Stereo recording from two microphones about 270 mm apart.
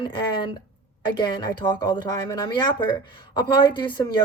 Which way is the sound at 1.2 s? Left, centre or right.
Centre.